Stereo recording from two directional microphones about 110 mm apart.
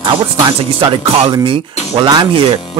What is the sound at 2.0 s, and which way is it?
Speech, 40° right (ahead or behind).